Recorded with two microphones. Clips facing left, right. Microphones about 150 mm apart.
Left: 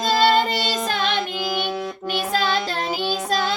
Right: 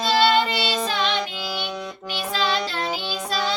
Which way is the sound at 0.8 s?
50° left (ahead or behind).